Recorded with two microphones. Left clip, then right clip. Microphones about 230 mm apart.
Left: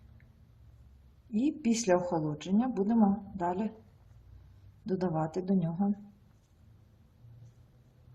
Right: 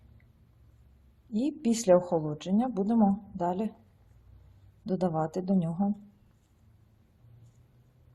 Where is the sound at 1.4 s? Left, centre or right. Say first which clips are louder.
Right 1 dB; right.